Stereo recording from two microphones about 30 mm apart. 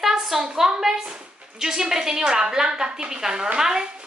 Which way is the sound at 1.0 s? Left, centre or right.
Right.